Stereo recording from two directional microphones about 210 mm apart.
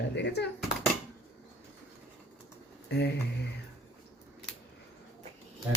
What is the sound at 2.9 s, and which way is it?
Speech, 55° left (ahead or behind).